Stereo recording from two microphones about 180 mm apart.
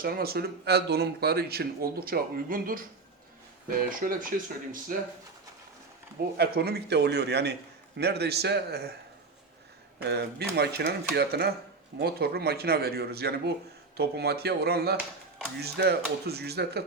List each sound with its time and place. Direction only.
0.0 s speech: 55° right (ahead or behind)
6.3 s a man's voice: 65° right (ahead or behind)
10.0 s a man's voice: 65° right (ahead or behind)